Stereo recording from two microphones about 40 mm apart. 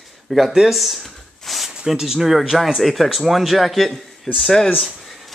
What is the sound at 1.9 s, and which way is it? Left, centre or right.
A man's voice, centre.